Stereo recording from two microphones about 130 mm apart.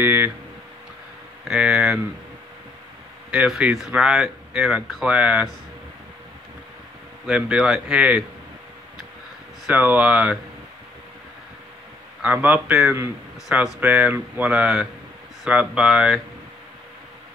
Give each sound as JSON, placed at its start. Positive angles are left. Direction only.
{"t": 0.0, "sound": "speech", "side_deg": -15}
{"t": 1.5, "sound": "speech", "side_deg": -5}
{"t": 3.3, "sound": "speech", "side_deg": -5}
{"t": 7.2, "sound": "speech", "side_deg": -10}
{"t": 9.7, "sound": "speech", "side_deg": -10}
{"t": 12.2, "sound": "speech", "side_deg": -10}